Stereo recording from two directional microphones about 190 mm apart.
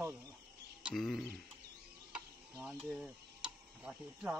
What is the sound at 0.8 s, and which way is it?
Speech, centre (ahead or behind).